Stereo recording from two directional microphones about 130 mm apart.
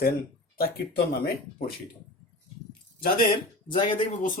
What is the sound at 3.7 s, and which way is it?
Speech, 40° left (ahead or behind).